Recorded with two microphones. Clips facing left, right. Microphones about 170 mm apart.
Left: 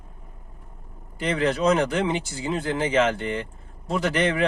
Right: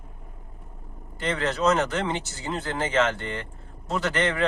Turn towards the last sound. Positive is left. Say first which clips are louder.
# left 2 dB
turn(degrees=15)  # may be behind; listen again after turning